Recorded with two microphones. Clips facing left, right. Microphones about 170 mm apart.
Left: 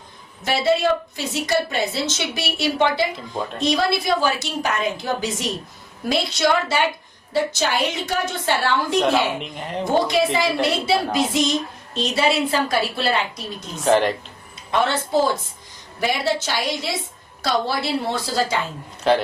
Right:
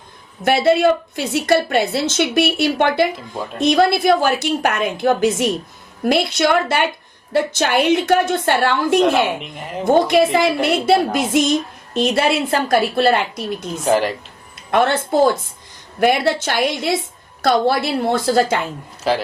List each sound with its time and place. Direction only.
0.4 s a woman's voice: 55° right (ahead or behind)
9.0 s speech: centre (ahead or behind)
9.8 s a woman's voice: 55° right (ahead or behind)
13.8 s speech: 5° right (ahead or behind)
14.7 s a woman's voice: 55° right (ahead or behind)
16.0 s a woman's voice: 60° right (ahead or behind)
19.1 s speech: 5° right (ahead or behind)